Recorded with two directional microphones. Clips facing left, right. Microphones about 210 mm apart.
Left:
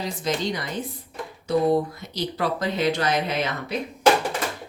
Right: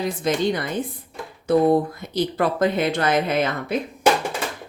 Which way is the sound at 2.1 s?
55° right (ahead or behind).